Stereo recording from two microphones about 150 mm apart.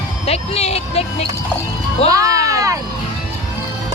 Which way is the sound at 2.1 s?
25° right (ahead or behind).